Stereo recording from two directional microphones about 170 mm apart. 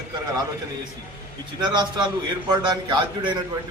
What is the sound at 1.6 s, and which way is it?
A man's voice, 25° right (ahead or behind).